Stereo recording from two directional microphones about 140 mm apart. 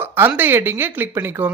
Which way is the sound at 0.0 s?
15° right (ahead or behind).